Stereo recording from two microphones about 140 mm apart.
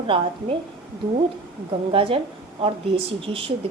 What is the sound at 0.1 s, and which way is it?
Speech, 40° right (ahead or behind).